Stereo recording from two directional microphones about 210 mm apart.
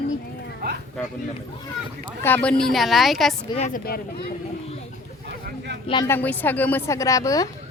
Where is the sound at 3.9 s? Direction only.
45° left (ahead or behind).